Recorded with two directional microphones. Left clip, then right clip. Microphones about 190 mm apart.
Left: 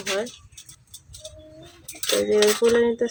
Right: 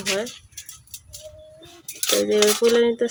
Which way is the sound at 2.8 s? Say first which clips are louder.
Right 2 dB; 15° right (ahead or behind).